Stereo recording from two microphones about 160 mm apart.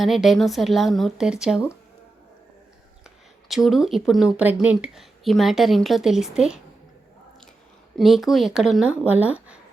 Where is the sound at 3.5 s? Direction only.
Centre (ahead or behind).